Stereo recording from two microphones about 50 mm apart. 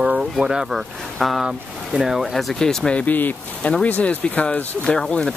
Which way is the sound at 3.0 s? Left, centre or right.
Left.